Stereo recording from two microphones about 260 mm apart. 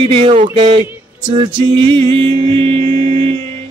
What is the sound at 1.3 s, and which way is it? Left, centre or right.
Music, centre.